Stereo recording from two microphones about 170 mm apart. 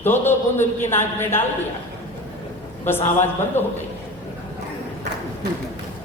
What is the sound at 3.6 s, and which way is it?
Speech, 15° left (ahead or behind).